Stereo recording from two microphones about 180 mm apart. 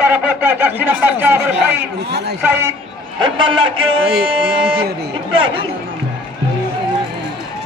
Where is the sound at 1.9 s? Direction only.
70° right (ahead or behind).